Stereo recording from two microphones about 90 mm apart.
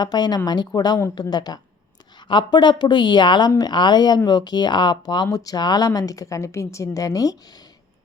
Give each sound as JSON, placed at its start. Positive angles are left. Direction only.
{"t": 0.0, "sound": "speech", "side_deg": 50}